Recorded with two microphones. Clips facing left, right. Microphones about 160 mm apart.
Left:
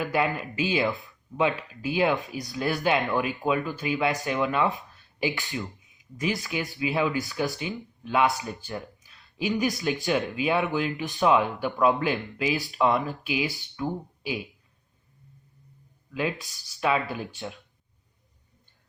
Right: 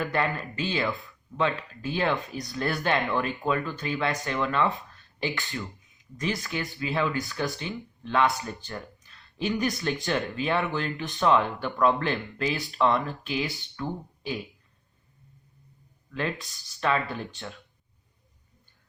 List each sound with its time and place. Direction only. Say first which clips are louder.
0.0 s speech: left 2 dB; 5° left (ahead or behind)
4.2 s speech: left 1 dB; 20° left (ahead or behind)
6.1 s speech: left 2 dB; 10° left (ahead or behind)
7.4 s speech: left 2 dB; centre (ahead or behind)
8.8 s a sound: left 1 dB; centre (ahead or behind)
10.0 s speech: left 2 dB; centre (ahead or behind)
16.1 s speech: left 2 dB; 5° left (ahead or behind)